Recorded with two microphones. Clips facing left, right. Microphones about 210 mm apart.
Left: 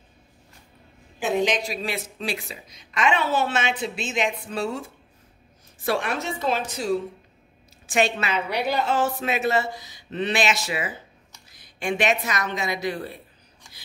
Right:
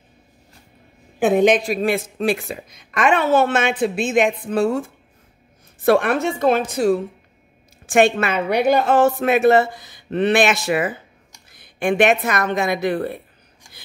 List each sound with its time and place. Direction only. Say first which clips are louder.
1.2 s a woman's voice: right 8 dB; 55° right (ahead or behind)